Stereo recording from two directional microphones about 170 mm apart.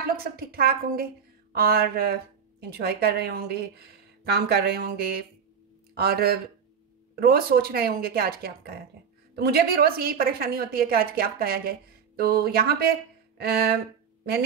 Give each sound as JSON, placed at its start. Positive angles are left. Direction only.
{"t": 0.1, "sound": "a woman's voice", "side_deg": -60}
{"t": 5.9, "sound": "a woman's voice", "side_deg": -65}